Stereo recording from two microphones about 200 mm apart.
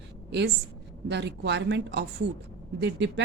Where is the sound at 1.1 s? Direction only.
60° right (ahead or behind).